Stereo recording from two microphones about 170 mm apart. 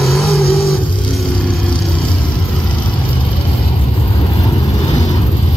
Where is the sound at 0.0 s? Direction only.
Centre (ahead or behind).